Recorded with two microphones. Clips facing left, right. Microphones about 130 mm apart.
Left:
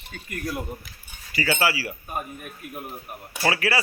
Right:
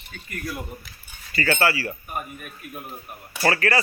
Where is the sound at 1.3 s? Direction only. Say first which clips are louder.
Right 2 dB; 10° left (ahead or behind).